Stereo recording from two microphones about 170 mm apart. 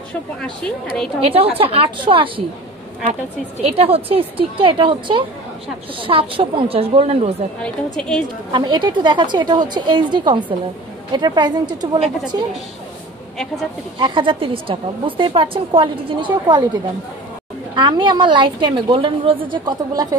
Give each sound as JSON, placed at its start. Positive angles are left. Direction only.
{"t": 0.4, "sound": "speech", "side_deg": 5}
{"t": 1.3, "sound": "a woman's voice", "side_deg": -35}
{"t": 7.6, "sound": "speech", "side_deg": 5}
{"t": 8.5, "sound": "a woman's voice", "side_deg": -25}
{"t": 13.9, "sound": "a woman's voice", "side_deg": -30}
{"t": 17.7, "sound": "a woman's voice", "side_deg": -25}